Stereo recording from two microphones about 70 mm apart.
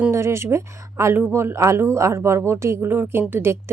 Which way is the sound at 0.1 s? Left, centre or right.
Right.